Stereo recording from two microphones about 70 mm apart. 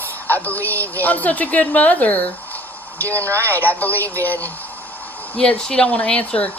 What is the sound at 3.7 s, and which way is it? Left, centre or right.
Speech, left.